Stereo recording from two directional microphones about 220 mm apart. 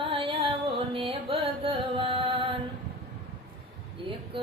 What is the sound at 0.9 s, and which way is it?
Carnatic music, 25° right (ahead or behind).